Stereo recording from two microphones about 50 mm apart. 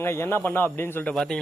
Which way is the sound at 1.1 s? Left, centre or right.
Centre.